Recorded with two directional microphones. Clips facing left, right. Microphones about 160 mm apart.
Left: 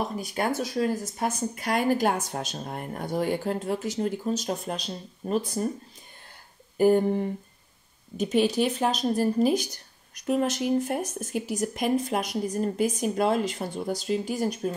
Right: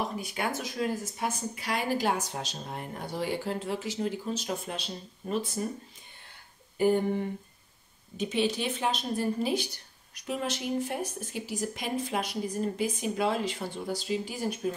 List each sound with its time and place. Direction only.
0.2 s a woman's voice: 40° left (ahead or behind)
6.8 s a woman's voice: 40° left (ahead or behind)